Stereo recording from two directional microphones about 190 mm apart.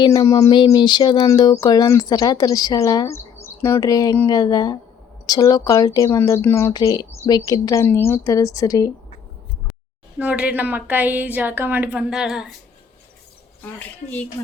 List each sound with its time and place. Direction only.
0.0 s speech: 25° left (ahead or behind)
10.2 s a woman's voice: 5° right (ahead or behind)
13.7 s speech: 10° left (ahead or behind)